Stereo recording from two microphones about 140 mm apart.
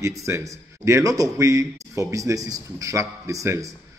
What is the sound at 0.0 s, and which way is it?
Speech, 20° right (ahead or behind).